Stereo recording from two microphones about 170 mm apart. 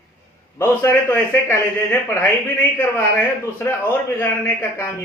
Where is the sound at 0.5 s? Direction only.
15° left (ahead or behind).